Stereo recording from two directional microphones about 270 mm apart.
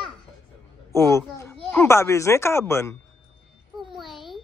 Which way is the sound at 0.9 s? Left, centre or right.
Centre.